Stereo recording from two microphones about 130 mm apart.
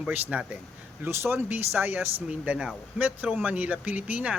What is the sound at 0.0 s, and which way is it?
Speech, 10° right (ahead or behind).